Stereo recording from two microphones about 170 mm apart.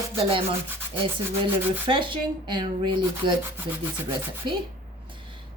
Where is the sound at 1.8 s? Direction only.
30° right (ahead or behind).